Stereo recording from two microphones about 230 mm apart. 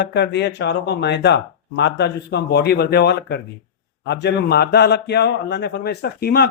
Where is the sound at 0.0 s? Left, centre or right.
Left.